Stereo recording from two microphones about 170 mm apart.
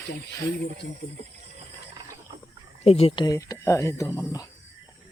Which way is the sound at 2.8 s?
35° left (ahead or behind).